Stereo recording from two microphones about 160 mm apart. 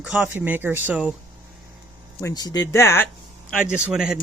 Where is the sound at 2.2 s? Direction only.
25° left (ahead or behind).